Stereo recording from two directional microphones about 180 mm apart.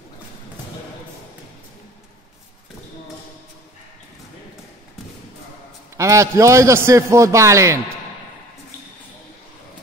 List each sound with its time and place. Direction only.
5.9 s a man's voice: 15° right (ahead or behind)